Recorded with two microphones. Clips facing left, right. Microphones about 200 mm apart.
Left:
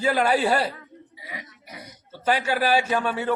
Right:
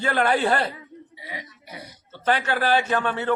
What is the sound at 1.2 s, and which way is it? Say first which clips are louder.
Burping: right 1 dB; 25° right (ahead or behind).